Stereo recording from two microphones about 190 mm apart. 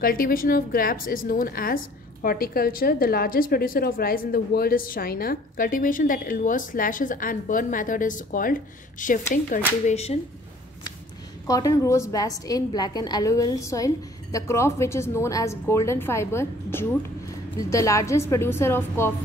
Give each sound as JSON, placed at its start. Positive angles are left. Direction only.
{"t": 0.0, "sound": "a woman's voice", "side_deg": 50}
{"t": 11.4, "sound": "a woman's voice", "side_deg": 20}